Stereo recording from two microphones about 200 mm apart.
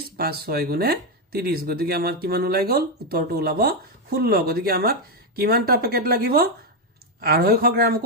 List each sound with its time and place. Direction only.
0.2 s speech: 50° right (ahead or behind)